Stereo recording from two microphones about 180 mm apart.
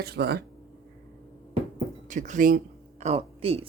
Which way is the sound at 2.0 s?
45° right (ahead or behind).